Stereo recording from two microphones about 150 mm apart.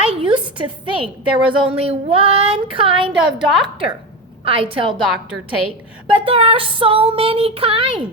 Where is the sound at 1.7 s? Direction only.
40° right (ahead or behind).